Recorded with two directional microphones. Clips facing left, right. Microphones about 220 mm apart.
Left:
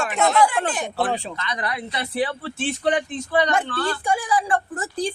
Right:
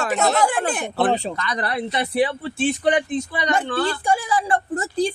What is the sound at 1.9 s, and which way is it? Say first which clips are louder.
Speech: right 4 dB; 15° right (ahead or behind).